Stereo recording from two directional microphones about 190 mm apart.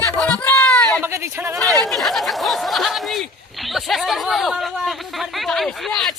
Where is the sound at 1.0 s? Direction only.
15° right (ahead or behind).